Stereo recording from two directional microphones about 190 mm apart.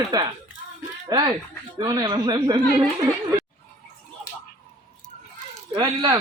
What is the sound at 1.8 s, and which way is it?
Speech, 25° right (ahead or behind).